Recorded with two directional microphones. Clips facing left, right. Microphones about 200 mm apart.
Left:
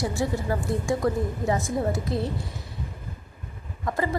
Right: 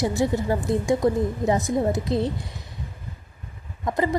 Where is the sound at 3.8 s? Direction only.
20° right (ahead or behind).